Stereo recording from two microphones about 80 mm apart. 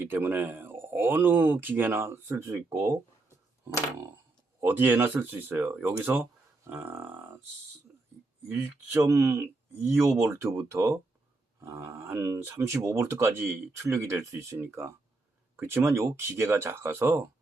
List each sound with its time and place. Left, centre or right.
0.0 s speech: right
4.6 s speech: right
6.7 s a sound: right
8.4 s speech: right